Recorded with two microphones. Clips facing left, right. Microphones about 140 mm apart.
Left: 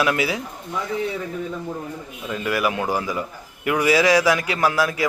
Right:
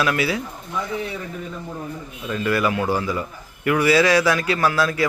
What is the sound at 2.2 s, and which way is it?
A man's voice, 15° left (ahead or behind).